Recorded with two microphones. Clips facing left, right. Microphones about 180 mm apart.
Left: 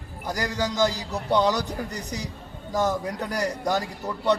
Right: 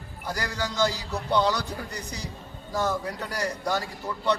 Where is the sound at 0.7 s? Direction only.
40° left (ahead or behind).